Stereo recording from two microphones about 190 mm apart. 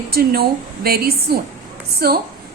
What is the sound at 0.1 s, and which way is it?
A woman's voice, 55° right (ahead or behind).